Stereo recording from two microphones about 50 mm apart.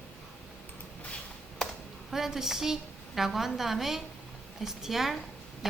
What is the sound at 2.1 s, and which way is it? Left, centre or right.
A woman's voice, centre.